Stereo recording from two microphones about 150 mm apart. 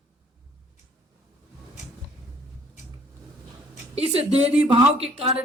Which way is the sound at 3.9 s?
40° right (ahead or behind).